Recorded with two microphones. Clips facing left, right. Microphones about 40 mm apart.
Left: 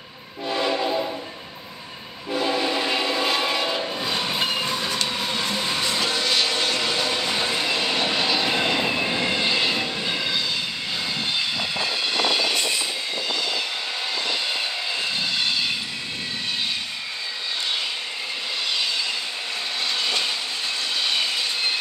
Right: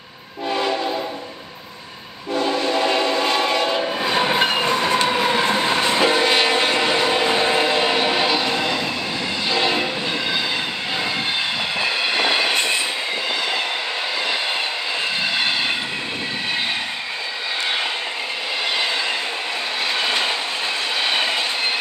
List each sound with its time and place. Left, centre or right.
0.6 s train: centre
2.3 s train: centre
3.8 s train: centre
4.2 s train: right
8.5 s train: centre
9.5 s train: centre
11.8 s train: right
20.0 s train: right